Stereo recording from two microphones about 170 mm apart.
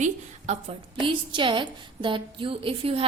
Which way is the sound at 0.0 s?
45° right (ahead or behind).